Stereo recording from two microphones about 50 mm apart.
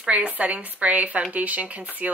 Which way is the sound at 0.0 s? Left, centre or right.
Right.